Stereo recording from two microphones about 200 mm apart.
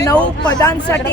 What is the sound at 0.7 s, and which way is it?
Speech, 5° left (ahead or behind).